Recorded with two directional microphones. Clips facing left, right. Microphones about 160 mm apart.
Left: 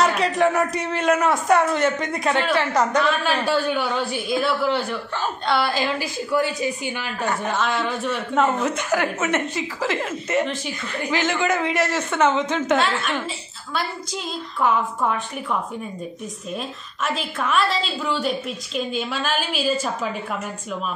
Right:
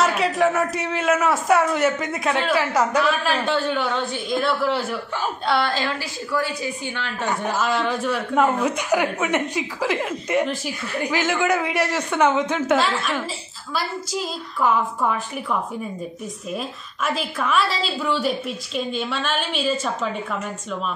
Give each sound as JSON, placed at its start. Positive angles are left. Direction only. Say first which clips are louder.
{"t": 0.0, "sound": "a man's voice", "louder": "even", "side_deg": 0}
{"t": 7.2, "sound": "a man's voice", "louder": "right 1 dB", "side_deg": -5}
{"t": 16.5, "sound": "a man's voice", "louder": "right 1 dB", "side_deg": 0}